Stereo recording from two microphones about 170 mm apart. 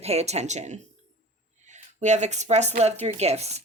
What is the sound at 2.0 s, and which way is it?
A woman's voice, 45° right (ahead or behind).